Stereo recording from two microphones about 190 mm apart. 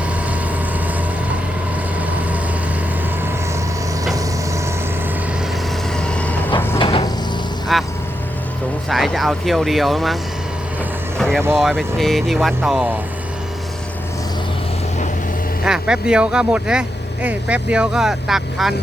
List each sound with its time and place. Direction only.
6.0 s vehicle: 5° left (ahead or behind)
6.7 s cupboard open or close: 25° left (ahead or behind)
7.7 s vehicle: centre (ahead or behind)
8.9 s speech: centre (ahead or behind)
11.2 s vehicle: centre (ahead or behind)
11.5 s speech: centre (ahead or behind)
15.6 s speech: 5° right (ahead or behind)